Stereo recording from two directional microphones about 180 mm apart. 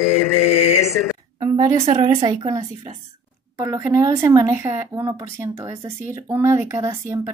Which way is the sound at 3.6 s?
15° right (ahead or behind).